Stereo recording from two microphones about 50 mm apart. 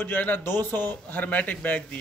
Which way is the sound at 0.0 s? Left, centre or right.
Left.